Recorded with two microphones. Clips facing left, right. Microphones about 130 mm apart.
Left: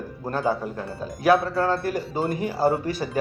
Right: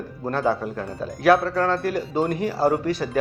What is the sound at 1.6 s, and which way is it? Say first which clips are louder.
Speech: right 1 dB; centre (ahead or behind).